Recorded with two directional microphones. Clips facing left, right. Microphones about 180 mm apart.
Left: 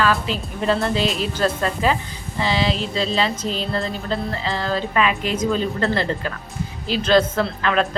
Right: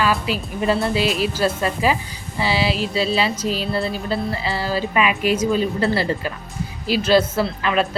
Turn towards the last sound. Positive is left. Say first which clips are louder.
# even
turn(degrees=-5)  # may be behind; listen again after turning